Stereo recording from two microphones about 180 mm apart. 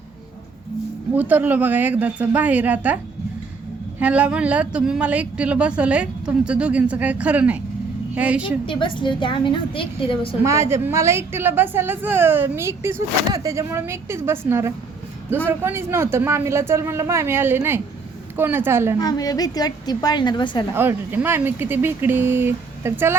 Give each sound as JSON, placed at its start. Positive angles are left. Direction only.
{"t": 1.1, "sound": "a woman's voice", "side_deg": -10}
{"t": 4.0, "sound": "a woman's voice", "side_deg": -5}
{"t": 8.6, "sound": "a woman's voice", "side_deg": 30}
{"t": 10.4, "sound": "a woman's voice", "side_deg": -15}
{"t": 18.9, "sound": "a woman's voice", "side_deg": 20}
{"t": 20.7, "sound": "a woman's voice", "side_deg": -10}